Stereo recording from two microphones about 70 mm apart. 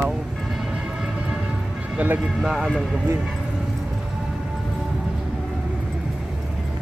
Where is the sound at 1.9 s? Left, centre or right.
Right.